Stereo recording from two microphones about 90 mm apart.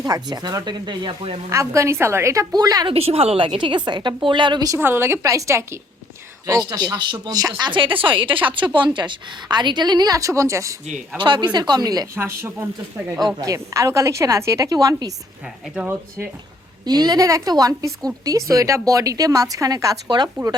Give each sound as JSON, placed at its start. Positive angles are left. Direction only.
{"t": 0.0, "sound": "speech", "side_deg": -45}
{"t": 1.5, "sound": "a woman's voice", "side_deg": -35}
{"t": 2.6, "sound": "speech", "side_deg": -45}
{"t": 2.8, "sound": "a woman's voice", "side_deg": -90}
{"t": 4.8, "sound": "a woman's voice", "side_deg": -25}
{"t": 6.5, "sound": "speech", "side_deg": -45}
{"t": 7.6, "sound": "a woman's voice", "side_deg": -65}
{"t": 11.2, "sound": "speech", "side_deg": -60}
{"t": 12.1, "sound": "speech", "side_deg": -30}
{"t": 13.2, "sound": "a woman's voice", "side_deg": -40}
{"t": 15.9, "sound": "speech", "side_deg": -25}
{"t": 16.8, "sound": "a woman's voice", "side_deg": -50}
{"t": 20.1, "sound": "speech", "side_deg": -50}